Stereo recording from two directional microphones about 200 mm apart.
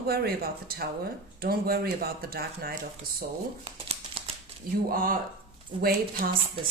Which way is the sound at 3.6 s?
30° right (ahead or behind).